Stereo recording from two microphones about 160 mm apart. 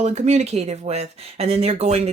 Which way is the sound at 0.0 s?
45° right (ahead or behind).